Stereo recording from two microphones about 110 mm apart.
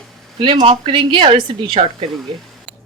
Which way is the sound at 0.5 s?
65° right (ahead or behind).